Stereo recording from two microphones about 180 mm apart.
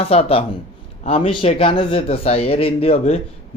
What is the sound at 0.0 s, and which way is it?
Speech, 35° left (ahead or behind).